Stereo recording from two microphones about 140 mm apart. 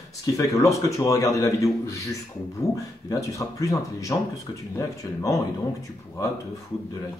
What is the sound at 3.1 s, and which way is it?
Speech, 25° left (ahead or behind).